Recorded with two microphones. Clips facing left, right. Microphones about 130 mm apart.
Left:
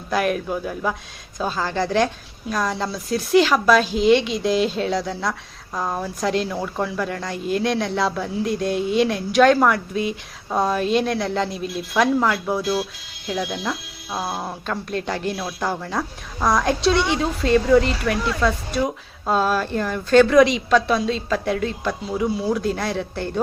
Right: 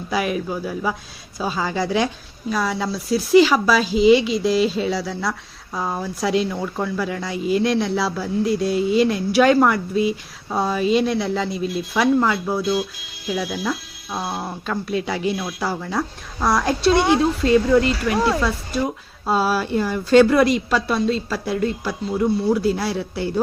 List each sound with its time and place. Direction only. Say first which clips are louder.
0.1 s speech: left 1 dB; centre (ahead or behind)
16.9 s speech: right 7 dB; 55° right (ahead or behind)
17.4 s speech: left 3 dB; centre (ahead or behind)
19.2 s speech: even; 5° right (ahead or behind)